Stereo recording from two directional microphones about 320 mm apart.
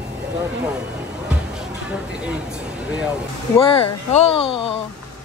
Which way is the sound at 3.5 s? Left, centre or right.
Centre.